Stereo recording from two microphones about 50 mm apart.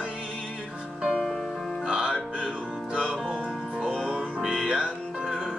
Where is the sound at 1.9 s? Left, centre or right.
Centre.